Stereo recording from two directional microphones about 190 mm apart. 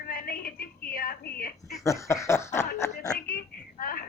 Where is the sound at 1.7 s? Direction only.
15° left (ahead or behind).